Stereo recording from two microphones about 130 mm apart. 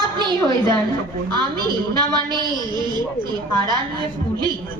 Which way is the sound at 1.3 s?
35° right (ahead or behind).